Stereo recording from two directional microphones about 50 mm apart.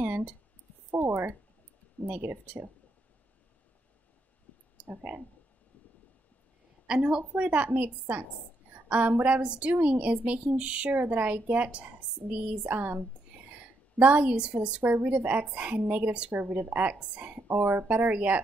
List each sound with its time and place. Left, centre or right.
0.0 s a sound: right
2.0 s a woman's voice: right
6.9 s a woman's voice: centre
7.3 s a woman's voice: right
11.0 s a woman's voice: right
12.7 s a woman's voice: right
13.9 s a woman's voice: right
17.8 s a woman's voice: right